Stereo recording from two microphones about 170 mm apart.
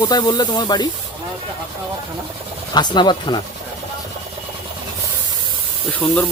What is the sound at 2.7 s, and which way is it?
Speech, 25° left (ahead or behind).